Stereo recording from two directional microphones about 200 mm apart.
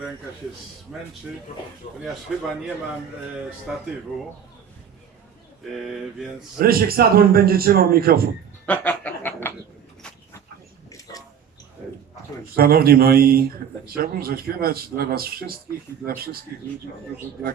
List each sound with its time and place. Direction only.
0.9 s speech: centre (ahead or behind)
1.8 s speech: 25° left (ahead or behind)
2.3 s speech: centre (ahead or behind)
3.7 s speech: 5° right (ahead or behind)
5.7 s speech: centre (ahead or behind)
6.6 s a man's voice: 50° right (ahead or behind)
8.6 s snicker: 5° left (ahead or behind)
12.5 s a man's voice: 50° right (ahead or behind)